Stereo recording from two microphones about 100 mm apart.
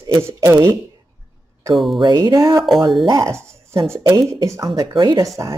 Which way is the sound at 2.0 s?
45° right (ahead or behind).